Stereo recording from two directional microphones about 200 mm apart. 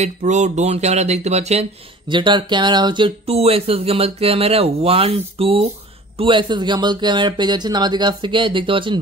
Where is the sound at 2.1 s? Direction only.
25° right (ahead or behind).